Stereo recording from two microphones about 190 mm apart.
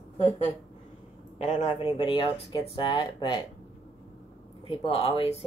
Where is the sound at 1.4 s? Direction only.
40° left (ahead or behind); by 3.4 s 25° left (ahead or behind).